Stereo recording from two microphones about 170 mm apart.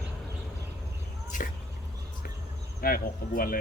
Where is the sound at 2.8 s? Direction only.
60° left (ahead or behind).